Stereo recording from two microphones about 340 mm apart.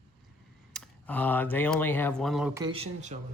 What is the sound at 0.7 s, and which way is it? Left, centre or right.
Speech, centre.